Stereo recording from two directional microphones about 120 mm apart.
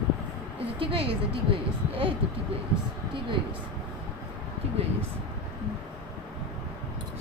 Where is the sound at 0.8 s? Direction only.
45° right (ahead or behind).